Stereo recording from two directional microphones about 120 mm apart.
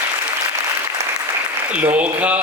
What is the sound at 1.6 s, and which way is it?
Speech, 10° right (ahead or behind).